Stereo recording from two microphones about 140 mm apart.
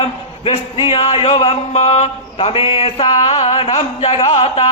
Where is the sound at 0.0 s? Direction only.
40° left (ahead or behind).